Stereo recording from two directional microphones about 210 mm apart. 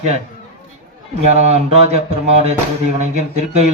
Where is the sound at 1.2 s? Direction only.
30° right (ahead or behind).